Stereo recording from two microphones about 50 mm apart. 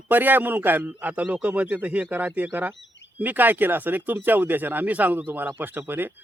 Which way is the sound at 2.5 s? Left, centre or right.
Right.